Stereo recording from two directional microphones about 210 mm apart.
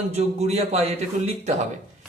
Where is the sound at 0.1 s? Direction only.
30° right (ahead or behind).